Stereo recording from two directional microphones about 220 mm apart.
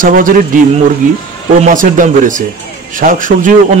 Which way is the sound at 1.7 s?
35° right (ahead or behind).